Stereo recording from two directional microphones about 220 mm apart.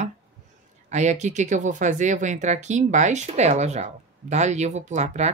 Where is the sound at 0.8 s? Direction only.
30° right (ahead or behind).